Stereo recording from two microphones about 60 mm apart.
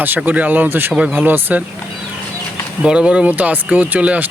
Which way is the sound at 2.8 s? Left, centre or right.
Centre.